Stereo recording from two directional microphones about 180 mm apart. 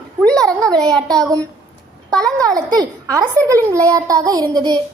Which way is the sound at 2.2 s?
20° right (ahead or behind).